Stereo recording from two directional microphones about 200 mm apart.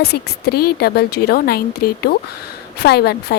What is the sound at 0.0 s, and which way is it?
A woman's voice, 55° left (ahead or behind).